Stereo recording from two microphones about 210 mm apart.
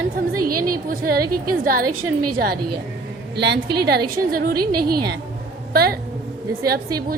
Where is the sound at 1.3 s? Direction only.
90° right.